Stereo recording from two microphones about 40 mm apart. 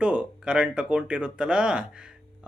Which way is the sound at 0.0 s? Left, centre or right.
Right.